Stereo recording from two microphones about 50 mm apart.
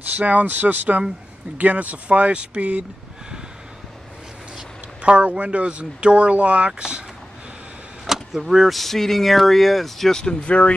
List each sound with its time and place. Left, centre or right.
0.2 s speech: right
5.1 s speech: right
8.1 s speech: centre
10.1 s speech: centre